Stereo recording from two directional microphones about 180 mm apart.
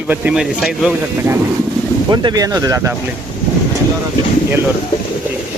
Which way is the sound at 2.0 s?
25° right (ahead or behind).